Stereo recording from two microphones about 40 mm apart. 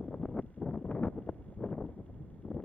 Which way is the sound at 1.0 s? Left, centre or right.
Left.